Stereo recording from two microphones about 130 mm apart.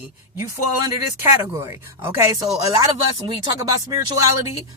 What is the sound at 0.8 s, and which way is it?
Speech, 20° right (ahead or behind).